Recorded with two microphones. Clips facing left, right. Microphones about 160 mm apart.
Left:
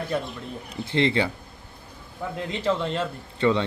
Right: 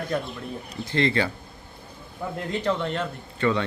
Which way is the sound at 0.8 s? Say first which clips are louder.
Left 1 dB; 20° left (ahead or behind).